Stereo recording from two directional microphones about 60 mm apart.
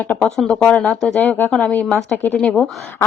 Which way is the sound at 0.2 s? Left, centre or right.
Centre.